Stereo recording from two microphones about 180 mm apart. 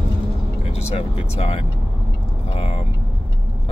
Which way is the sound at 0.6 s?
35° left (ahead or behind).